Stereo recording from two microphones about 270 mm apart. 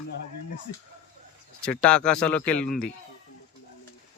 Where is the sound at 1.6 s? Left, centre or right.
Centre.